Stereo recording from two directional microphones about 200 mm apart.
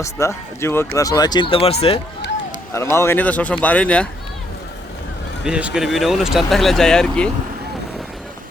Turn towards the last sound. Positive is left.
turn(degrees=5)  # may be behind; listen again after turning